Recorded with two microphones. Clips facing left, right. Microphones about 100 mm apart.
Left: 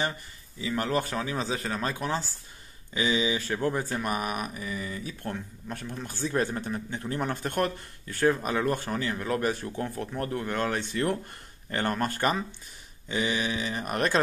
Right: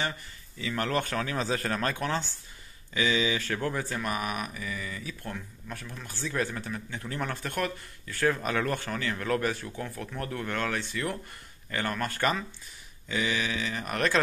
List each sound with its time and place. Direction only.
0.6 s speech: 20° left (ahead or behind)
2.9 s speech: 25° left (ahead or behind)
8.4 s speech: 15° left (ahead or behind)